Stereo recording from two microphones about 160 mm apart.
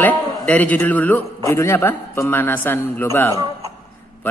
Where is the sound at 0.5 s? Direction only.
10° left (ahead or behind).